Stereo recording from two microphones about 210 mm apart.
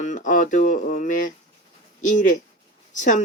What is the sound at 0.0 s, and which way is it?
Speech, 35° left (ahead or behind).